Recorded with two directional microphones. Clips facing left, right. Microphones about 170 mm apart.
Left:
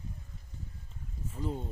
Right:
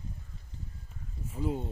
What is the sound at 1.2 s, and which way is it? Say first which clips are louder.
Speech: right 3 dB; 10° right (ahead or behind).